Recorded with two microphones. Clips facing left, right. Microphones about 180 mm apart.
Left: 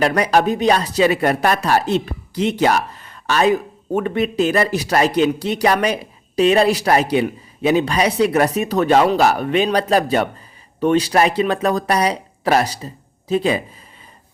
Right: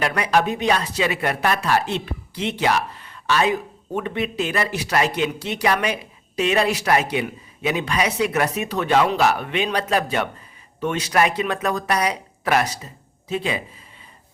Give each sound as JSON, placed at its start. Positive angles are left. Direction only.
{"t": 0.0, "sound": "speech", "side_deg": 40}